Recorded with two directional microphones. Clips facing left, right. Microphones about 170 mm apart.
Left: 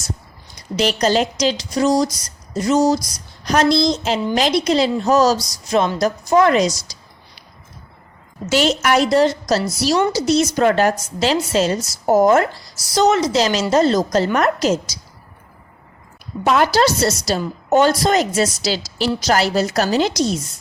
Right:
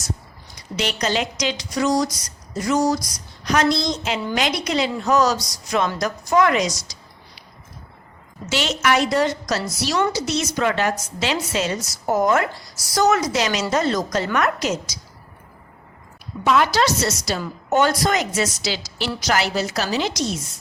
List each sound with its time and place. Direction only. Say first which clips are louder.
0.8 s a woman's voice: left 6 dB; 35° left (ahead or behind)
8.4 s a woman's voice: left 4 dB; 40° left (ahead or behind)
16.4 s a woman's voice: left 3 dB; 40° left (ahead or behind)